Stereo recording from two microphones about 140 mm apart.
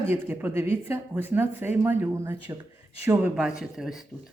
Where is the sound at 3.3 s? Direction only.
5° right (ahead or behind).